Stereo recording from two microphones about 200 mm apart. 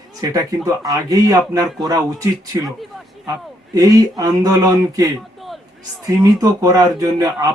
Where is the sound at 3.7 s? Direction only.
20° right (ahead or behind).